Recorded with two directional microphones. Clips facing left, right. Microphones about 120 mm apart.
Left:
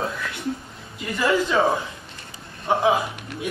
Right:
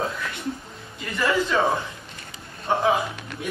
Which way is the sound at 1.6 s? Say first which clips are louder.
Left 2 dB; 10° left (ahead or behind).